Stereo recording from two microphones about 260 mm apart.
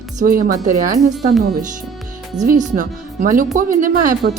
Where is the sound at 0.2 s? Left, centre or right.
Right.